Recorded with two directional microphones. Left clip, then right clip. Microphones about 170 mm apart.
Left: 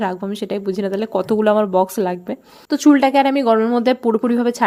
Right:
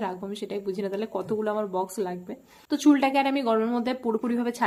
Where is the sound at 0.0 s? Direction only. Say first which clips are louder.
Left 9 dB; 45° left (ahead or behind).